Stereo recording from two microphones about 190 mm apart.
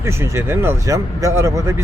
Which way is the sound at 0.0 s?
15° right (ahead or behind).